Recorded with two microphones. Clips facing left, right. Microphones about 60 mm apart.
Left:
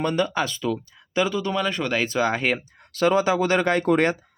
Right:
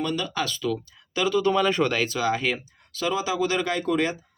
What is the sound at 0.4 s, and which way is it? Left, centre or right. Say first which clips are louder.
Speech: left 1 dB; left.